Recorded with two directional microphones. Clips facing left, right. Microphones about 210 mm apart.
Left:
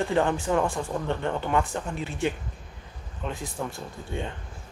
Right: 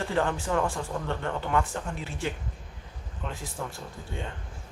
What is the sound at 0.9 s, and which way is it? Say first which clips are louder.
Speech: left 3 dB; 15° left (ahead or behind).